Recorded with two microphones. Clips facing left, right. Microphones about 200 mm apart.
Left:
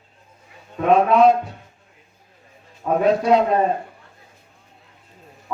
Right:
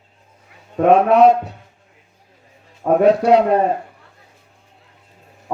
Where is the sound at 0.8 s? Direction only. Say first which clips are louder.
Right 3 dB; 65° right (ahead or behind).